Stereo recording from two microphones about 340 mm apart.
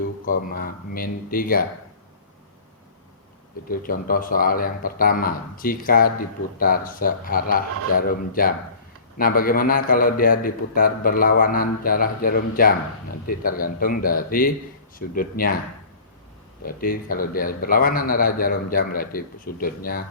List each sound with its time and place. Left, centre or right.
0.3 s a man's voice: left
3.7 s a man's voice: left
16.6 s a man's voice: left